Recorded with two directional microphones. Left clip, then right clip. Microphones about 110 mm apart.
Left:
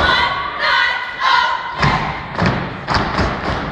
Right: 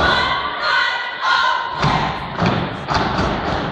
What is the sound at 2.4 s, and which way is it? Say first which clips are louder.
Thump: left 1 dB; 30° left (ahead or behind).